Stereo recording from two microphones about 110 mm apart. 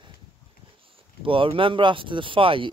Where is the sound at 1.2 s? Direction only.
50° right (ahead or behind).